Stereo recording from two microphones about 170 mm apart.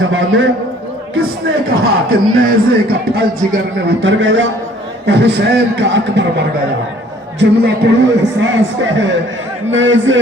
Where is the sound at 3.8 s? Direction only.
90° right.